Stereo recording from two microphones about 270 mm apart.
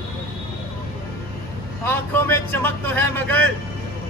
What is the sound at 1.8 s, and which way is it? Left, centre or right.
Speech, centre.